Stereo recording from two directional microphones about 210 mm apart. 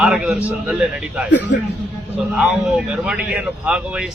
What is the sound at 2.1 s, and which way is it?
Speech, 5° right (ahead or behind).